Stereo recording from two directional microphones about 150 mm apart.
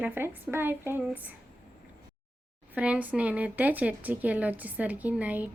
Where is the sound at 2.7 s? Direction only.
10° right (ahead or behind).